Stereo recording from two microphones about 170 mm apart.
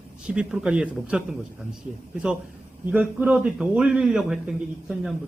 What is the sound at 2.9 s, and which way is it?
Speech, 5° right (ahead or behind).